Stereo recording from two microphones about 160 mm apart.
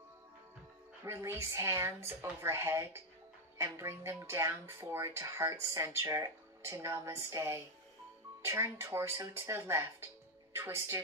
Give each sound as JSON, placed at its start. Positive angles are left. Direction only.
{"t": 1.0, "sound": "a woman's voice", "side_deg": -15}